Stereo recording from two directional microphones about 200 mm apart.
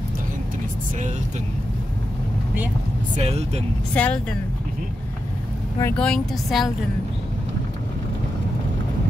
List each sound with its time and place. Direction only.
3.2 s speech: 30° right (ahead or behind)
3.9 s a woman's voice: 5° left (ahead or behind)
5.8 s speech: 10° left (ahead or behind)